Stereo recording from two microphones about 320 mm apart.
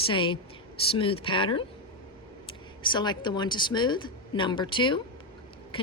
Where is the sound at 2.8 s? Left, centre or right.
Centre.